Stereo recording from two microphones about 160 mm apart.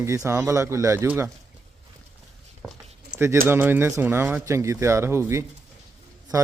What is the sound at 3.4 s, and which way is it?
A man's voice, 15° right (ahead or behind).